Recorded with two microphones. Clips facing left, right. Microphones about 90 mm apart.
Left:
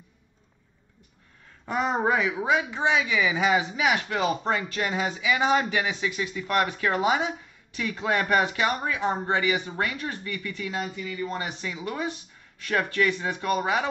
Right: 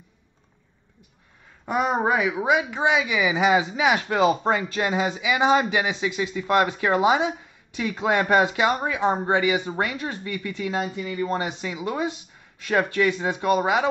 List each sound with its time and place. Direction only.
1.7 s speech: 10° right (ahead or behind)
11.1 s speech: 45° right (ahead or behind)
11.3 s speech: 25° right (ahead or behind)